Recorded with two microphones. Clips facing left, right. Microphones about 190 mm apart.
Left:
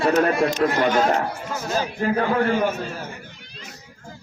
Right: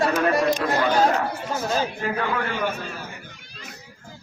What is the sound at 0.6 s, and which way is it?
Speech, 45° left (ahead or behind).